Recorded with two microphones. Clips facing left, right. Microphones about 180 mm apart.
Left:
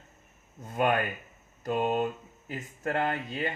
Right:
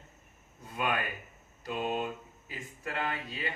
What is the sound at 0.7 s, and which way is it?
Speech, 45° left (ahead or behind).